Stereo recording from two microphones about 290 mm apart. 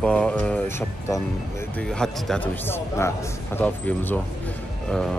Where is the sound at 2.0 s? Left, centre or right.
Centre.